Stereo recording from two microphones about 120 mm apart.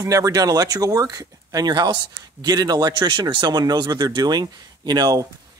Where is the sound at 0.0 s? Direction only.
30° right (ahead or behind).